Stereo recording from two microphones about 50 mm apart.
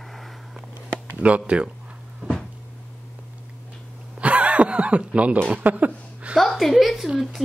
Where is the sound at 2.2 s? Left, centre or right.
Right.